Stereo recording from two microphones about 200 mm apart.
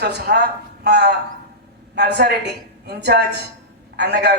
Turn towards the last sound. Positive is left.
turn(degrees=-55)  # may be behind; listen again after turning